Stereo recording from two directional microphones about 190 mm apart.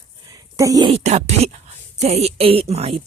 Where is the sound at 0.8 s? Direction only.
35° right (ahead or behind).